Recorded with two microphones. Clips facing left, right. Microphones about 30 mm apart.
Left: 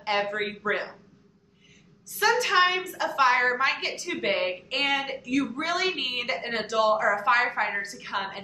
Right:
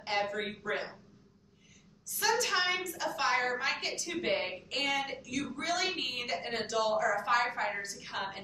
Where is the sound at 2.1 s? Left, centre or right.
Left.